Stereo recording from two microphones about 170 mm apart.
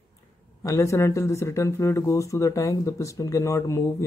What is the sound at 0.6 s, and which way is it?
Speech, 20° left (ahead or behind).